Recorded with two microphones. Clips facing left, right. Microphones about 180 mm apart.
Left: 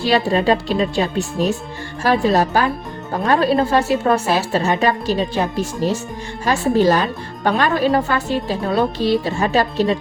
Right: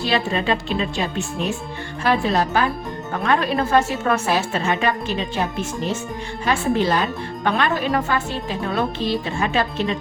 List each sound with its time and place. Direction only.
0.1 s a woman's voice: 35° left (ahead or behind)